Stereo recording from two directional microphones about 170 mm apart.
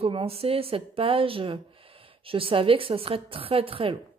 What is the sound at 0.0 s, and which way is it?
Speech, 35° right (ahead or behind).